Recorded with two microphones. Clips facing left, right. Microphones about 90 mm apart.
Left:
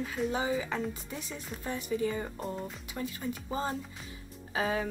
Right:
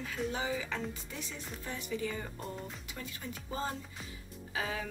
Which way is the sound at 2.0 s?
25° left (ahead or behind).